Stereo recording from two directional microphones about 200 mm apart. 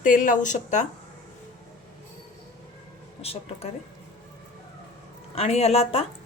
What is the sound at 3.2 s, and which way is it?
Speech, 30° left (ahead or behind).